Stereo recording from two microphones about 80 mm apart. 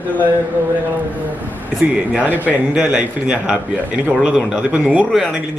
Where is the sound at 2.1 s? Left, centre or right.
Centre.